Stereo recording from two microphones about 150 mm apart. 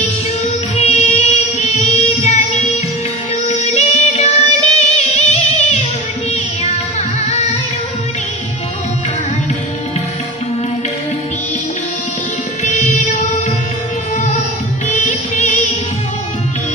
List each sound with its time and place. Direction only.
0.7 s music: 50° left (ahead or behind)
12.6 s music: 55° left (ahead or behind)
14.9 s music: 50° left (ahead or behind)